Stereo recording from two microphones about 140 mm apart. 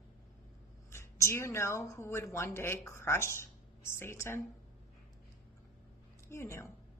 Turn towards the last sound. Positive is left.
turn(degrees=20)  # may be behind; listen again after turning